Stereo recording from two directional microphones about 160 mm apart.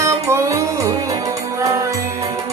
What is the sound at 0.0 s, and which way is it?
Music, 20° right (ahead or behind).